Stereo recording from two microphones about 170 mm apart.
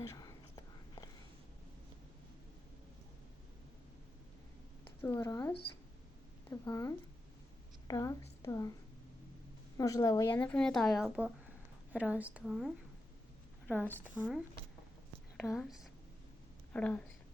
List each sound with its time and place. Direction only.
0.0 s whispering: 20° left (ahead or behind)
5.0 s a woman's voice: 15° left (ahead or behind)
9.7 s a woman's voice: 20° left (ahead or behind)
10.3 s a woman's voice: 5° left (ahead or behind)
13.7 s speech: 10° left (ahead or behind)
15.4 s a woman's voice: centre (ahead or behind)